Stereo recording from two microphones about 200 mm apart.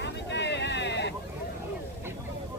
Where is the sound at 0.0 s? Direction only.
60° left (ahead or behind).